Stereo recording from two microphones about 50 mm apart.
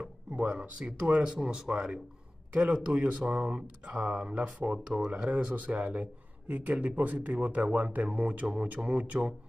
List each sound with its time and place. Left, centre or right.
0.5 s speech: centre